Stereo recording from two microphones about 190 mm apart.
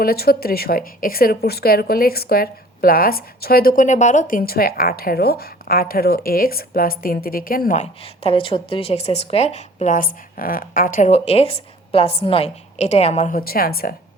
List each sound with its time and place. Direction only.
0.0 s a woman's voice: 55° left (ahead or behind)
8.0 s speech: 30° left (ahead or behind); by 11.1 s 45° left (ahead or behind)
11.1 s speech: 30° left (ahead or behind); by 13.9 s 50° left (ahead or behind)